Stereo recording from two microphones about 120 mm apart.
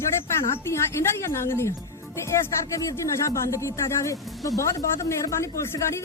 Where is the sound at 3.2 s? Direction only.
25° left (ahead or behind).